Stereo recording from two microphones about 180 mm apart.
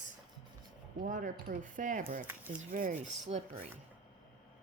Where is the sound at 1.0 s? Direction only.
50° right (ahead or behind).